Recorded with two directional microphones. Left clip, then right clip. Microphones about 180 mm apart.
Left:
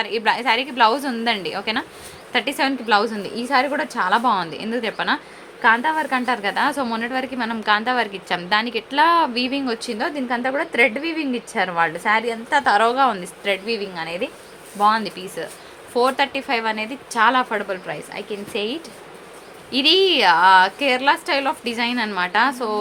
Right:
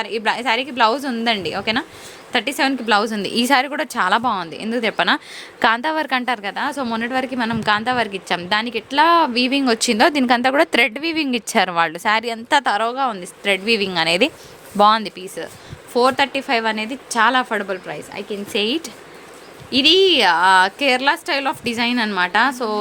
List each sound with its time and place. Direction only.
0.0 s a woman's voice: 25° right (ahead or behind); by 5.2 s 45° right (ahead or behind)
5.6 s a woman's voice: 75° right (ahead or behind); by 6.5 s 50° right (ahead or behind)
6.5 s a woman's voice: 30° right (ahead or behind); by 15.1 s 55° right (ahead or behind)
15.4 s a woman's voice: 30° right (ahead or behind)
18.5 s a woman's voice: 35° right (ahead or behind)
19.7 s a woman's voice: 25° right (ahead or behind)